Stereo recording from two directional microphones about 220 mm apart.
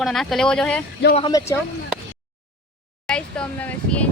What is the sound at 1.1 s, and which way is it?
Speech, 20° left (ahead or behind).